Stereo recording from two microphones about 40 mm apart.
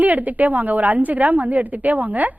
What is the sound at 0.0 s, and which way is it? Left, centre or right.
A woman's voice, right.